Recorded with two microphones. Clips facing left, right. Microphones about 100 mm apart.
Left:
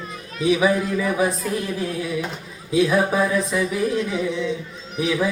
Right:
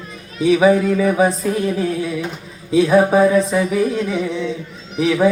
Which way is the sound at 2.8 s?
30° right (ahead or behind).